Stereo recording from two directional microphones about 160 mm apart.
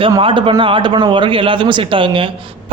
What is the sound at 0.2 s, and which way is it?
A man's voice, 35° right (ahead or behind).